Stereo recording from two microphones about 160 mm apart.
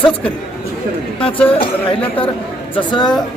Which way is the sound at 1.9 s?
35° left (ahead or behind).